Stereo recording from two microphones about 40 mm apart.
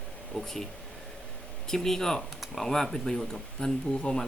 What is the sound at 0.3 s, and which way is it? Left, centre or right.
Speech, centre.